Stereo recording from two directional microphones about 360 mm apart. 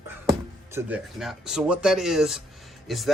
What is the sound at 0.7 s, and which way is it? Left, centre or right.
Speech, centre.